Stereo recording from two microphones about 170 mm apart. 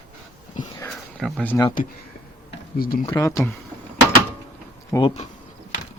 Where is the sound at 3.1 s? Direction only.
20° left (ahead or behind).